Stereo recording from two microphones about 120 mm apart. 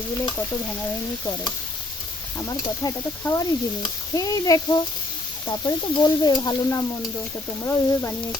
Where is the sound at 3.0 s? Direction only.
20° left (ahead or behind).